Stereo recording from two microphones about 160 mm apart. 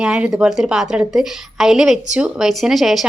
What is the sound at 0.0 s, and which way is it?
A woman's voice, 5° right (ahead or behind).